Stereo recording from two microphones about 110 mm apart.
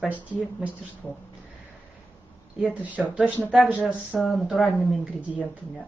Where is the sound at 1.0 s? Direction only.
15° left (ahead or behind).